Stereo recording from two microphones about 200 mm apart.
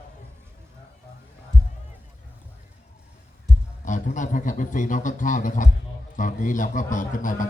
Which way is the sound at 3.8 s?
40° left (ahead or behind).